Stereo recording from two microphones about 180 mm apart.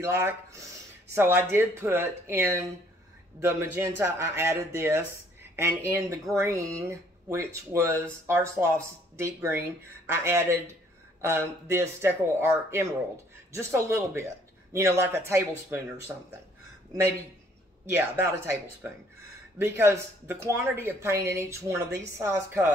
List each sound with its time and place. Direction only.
0.0 s speech: 15° right (ahead or behind)
16.9 s speech: 15° right (ahead or behind)